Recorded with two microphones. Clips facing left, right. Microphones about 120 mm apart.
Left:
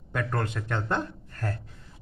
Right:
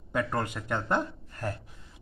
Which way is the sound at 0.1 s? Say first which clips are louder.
Even; 10° right (ahead or behind).